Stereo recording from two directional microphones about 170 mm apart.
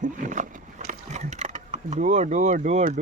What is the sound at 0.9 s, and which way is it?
Mechanisms, 45° right (ahead or behind).